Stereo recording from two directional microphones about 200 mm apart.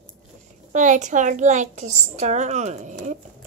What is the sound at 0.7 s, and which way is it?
A woman's voice, 40° right (ahead or behind).